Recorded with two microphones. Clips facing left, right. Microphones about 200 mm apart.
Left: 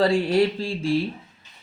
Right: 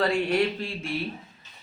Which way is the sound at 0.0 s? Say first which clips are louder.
Left 4 dB; 30° left (ahead or behind).